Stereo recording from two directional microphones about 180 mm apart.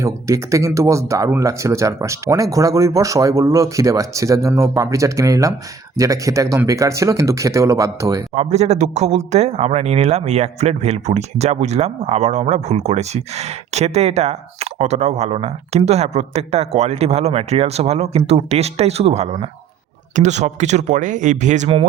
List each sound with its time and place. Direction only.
0.0 s speech: 15° right (ahead or behind)
8.4 s a man's voice: 40° right (ahead or behind)